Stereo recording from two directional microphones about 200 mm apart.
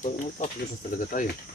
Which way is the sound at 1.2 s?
40° left (ahead or behind).